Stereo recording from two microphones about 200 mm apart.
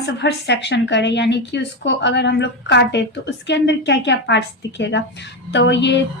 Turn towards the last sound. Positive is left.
turn(degrees=60)  # may be behind; listen again after turning